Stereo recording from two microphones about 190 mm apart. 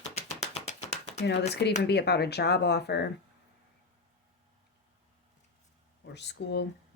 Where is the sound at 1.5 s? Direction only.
60° left (ahead or behind).